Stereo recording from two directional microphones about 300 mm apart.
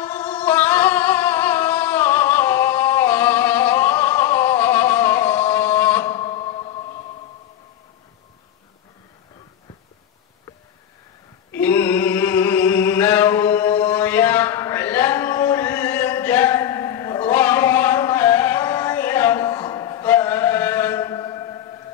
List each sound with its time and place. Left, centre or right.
0.0 s music: centre
6.3 s a sound: centre
11.5 s music: centre